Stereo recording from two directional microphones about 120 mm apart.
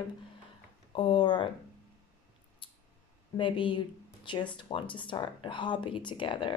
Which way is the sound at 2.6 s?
45° left (ahead or behind).